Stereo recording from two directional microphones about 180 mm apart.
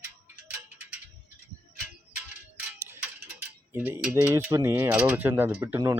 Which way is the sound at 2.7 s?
15° right (ahead or behind).